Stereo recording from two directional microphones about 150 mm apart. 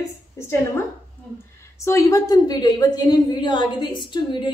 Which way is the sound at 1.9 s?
20° left (ahead or behind).